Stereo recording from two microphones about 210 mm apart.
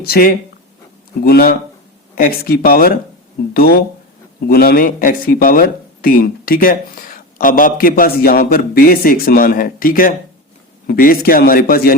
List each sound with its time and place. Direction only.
0.1 s speech: 45° left (ahead or behind)